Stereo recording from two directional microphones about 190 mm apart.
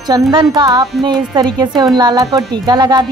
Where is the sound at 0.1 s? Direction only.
25° right (ahead or behind).